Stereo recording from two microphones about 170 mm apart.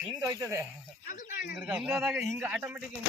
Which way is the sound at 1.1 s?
50° left (ahead or behind).